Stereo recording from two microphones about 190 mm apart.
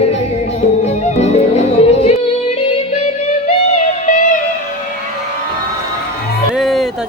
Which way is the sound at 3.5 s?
35° left (ahead or behind).